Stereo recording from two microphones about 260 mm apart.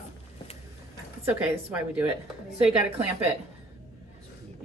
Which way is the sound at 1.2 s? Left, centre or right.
Centre.